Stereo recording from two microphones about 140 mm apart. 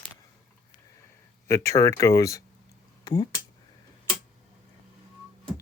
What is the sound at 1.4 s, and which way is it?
Speech, 20° left (ahead or behind).